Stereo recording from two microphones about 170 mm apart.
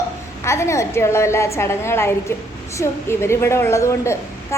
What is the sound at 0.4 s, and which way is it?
A woman's voice, 15° left (ahead or behind).